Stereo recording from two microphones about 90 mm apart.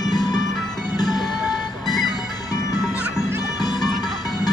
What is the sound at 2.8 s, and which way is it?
Music, 10° right (ahead or behind).